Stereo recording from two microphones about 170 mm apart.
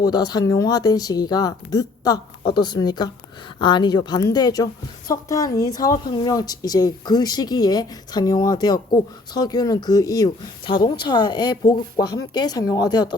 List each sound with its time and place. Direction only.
0.0 s speech: 25° left (ahead or behind)